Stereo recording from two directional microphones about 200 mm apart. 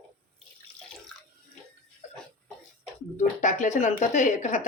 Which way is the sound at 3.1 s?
35° left (ahead or behind).